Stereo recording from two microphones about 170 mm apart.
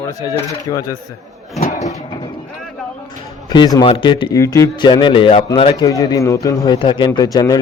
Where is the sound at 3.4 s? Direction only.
25° left (ahead or behind).